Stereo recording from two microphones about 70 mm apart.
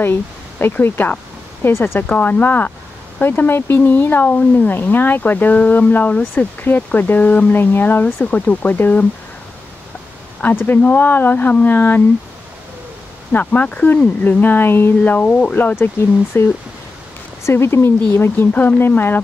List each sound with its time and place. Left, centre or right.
0.0 s speech: left
2.0 s speech: left
10.7 s speech: left
13.3 s speech: left
16.3 s speech: left